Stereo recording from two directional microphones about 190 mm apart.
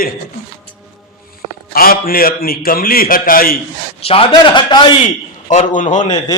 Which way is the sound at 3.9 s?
30° left (ahead or behind).